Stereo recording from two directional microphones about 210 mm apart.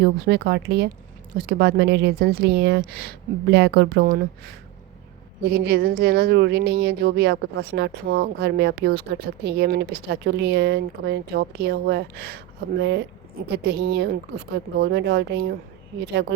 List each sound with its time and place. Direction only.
0.0 s speech: 50° right (ahead or behind)
5.4 s speech: 50° right (ahead or behind)